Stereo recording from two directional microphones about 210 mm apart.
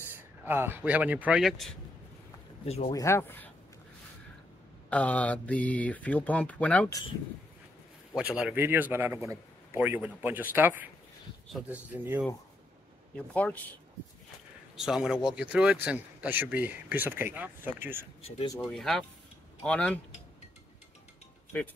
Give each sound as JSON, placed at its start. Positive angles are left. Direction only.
{"t": 0.5, "sound": "a man's voice", "side_deg": -10}
{"t": 2.6, "sound": "speech", "side_deg": 30}
{"t": 2.9, "sound": "speech", "side_deg": 15}
{"t": 4.8, "sound": "speech", "side_deg": 5}
{"t": 8.2, "sound": "a man's voice", "side_deg": -5}
{"t": 13.3, "sound": "speech", "side_deg": 5}
{"t": 14.8, "sound": "a man's voice", "side_deg": 0}
{"t": 18.6, "sound": "speech", "side_deg": 0}